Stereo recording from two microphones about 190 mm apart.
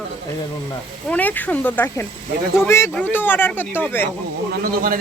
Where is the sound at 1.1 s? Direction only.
10° left (ahead or behind).